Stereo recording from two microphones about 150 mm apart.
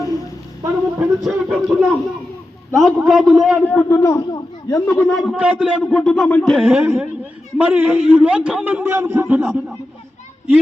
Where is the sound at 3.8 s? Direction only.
20° left (ahead or behind).